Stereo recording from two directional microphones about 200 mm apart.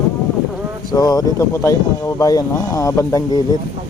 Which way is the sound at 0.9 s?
20° left (ahead or behind).